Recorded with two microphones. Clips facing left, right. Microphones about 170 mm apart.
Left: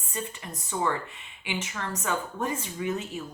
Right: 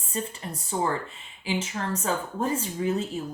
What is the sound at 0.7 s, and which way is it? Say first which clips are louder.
A woman's voice: right 1 dB; 30° right (ahead or behind).